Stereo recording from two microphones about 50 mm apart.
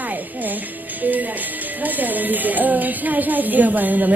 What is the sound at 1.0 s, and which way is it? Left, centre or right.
Speech, right.